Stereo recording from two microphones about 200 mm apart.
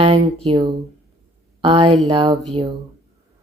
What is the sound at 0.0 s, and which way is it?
A woman's voice, 25° right (ahead or behind).